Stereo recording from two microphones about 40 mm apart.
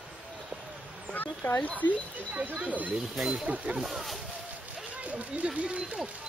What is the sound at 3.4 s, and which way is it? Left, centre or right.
Speech, right.